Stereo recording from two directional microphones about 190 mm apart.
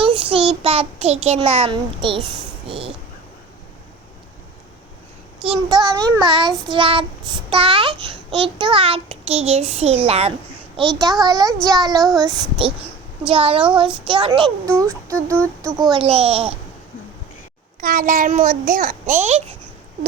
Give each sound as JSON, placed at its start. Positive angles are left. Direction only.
{"t": 0.0, "sound": "child singing", "side_deg": -30}
{"t": 2.6, "sound": "a sound", "side_deg": -30}
{"t": 5.5, "sound": "a child's voice", "side_deg": -20}
{"t": 11.2, "sound": "a child's voice", "side_deg": -20}
{"t": 11.9, "sound": "child singing", "side_deg": 0}
{"t": 12.3, "sound": "a child's voice", "side_deg": -25}
{"t": 14.8, "sound": "speech", "side_deg": -15}
{"t": 15.9, "sound": "a child's voice", "side_deg": -30}
{"t": 17.7, "sound": "a child's voice", "side_deg": -45}